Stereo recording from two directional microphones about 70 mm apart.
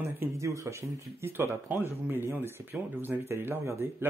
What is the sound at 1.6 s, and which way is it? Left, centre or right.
Speech, right.